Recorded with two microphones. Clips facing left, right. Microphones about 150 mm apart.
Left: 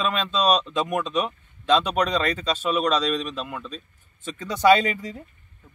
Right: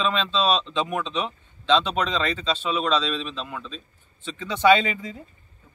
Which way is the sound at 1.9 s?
45° left (ahead or behind).